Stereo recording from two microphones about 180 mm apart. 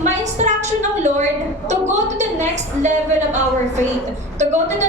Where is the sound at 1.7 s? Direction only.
40° right (ahead or behind).